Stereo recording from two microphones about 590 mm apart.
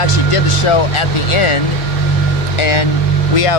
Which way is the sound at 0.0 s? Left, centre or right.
Left.